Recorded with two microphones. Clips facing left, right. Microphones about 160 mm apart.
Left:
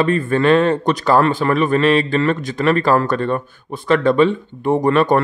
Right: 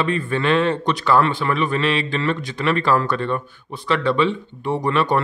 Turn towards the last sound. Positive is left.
turn(degrees=45)  # may be behind; listen again after turning